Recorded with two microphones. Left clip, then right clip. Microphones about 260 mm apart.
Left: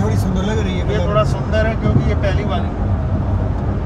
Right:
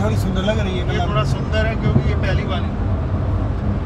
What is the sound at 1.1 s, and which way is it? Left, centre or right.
Speech, left.